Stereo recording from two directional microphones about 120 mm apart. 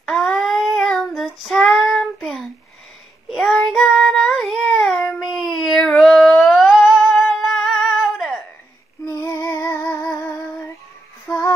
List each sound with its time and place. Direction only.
0.0 s child singing: 5° left (ahead or behind)
9.0 s female singing: 25° left (ahead or behind)